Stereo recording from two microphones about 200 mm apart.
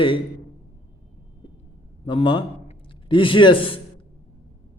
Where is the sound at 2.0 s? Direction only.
25° left (ahead or behind).